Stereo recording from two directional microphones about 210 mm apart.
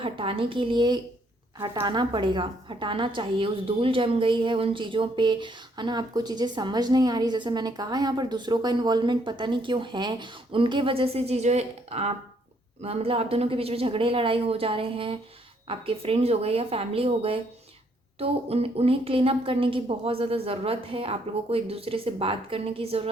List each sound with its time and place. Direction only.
0.0 s a woman's voice: 25° right (ahead or behind)